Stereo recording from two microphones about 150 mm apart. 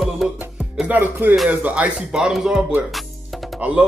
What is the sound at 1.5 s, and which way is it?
Speech, 10° right (ahead or behind).